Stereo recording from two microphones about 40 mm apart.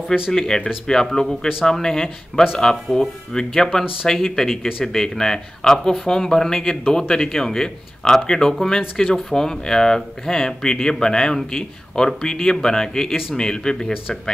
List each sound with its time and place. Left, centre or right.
0.1 s speech: centre